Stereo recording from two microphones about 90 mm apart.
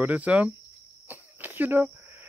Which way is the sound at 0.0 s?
15° right (ahead or behind).